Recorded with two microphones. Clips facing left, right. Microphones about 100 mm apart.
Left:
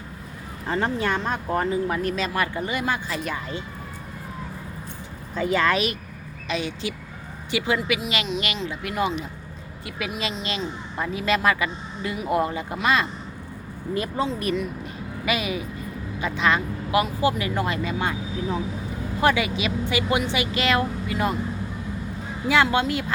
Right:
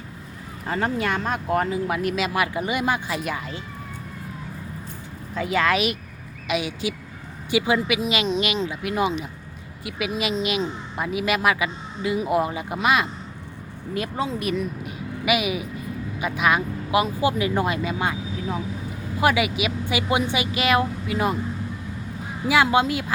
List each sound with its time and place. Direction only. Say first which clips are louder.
0.7 s speech: even; 5° right (ahead or behind)
5.3 s speech: even; centre (ahead or behind); by 9.1 s 20° right (ahead or behind)
10.4 s speech: right 4 dB; 15° right (ahead or behind)
14.2 s speech: even; 10° right (ahead or behind)
19.2 s speech: right 1 dB; 10° right (ahead or behind)
22.4 s speech: right 2 dB; 15° right (ahead or behind)